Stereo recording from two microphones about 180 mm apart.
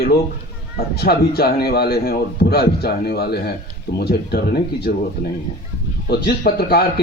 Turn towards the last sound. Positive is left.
turn(degrees=60)  # may be behind; listen again after turning